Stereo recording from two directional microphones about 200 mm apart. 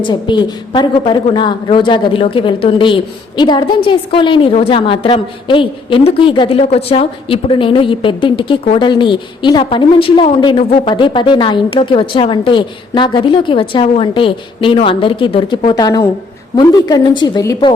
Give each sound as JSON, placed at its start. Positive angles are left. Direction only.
{"t": 0.0, "sound": "a woman's voice", "side_deg": 20}